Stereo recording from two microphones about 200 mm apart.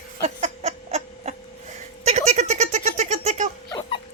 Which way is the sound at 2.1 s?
35° right (ahead or behind).